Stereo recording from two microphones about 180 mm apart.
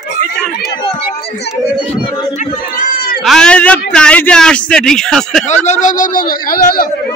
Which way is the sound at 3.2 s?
5° left (ahead or behind).